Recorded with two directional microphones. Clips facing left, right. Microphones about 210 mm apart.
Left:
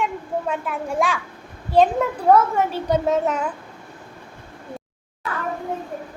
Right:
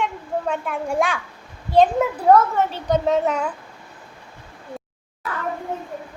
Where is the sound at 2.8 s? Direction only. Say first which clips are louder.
Right 2 dB; 5° left (ahead or behind).